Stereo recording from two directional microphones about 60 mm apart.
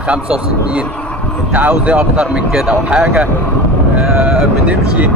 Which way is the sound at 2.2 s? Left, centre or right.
Centre.